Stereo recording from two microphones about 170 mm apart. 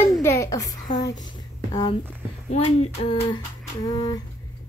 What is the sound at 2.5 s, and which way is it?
Speech, 40° left (ahead or behind).